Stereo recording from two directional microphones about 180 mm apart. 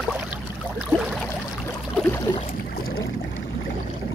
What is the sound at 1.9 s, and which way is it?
Boat, 10° left (ahead or behind).